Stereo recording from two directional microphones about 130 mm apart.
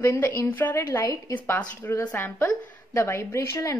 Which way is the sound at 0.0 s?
15° left (ahead or behind).